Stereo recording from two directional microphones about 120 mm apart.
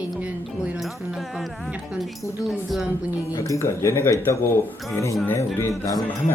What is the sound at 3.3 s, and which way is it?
Speech, 25° left (ahead or behind).